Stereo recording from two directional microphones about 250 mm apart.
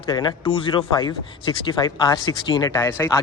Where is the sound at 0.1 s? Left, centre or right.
Centre.